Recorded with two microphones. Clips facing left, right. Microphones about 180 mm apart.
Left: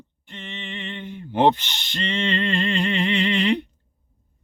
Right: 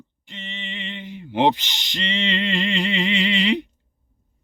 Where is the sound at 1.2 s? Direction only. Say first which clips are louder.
Left 1 dB; 10° right (ahead or behind).